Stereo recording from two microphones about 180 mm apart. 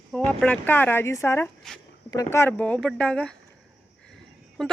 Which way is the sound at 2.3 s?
10° left (ahead or behind).